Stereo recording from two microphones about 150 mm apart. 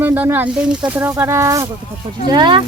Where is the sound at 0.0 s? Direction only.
10° right (ahead or behind).